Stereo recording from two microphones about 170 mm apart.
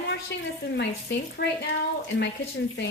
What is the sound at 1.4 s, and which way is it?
Speech, 75° left (ahead or behind).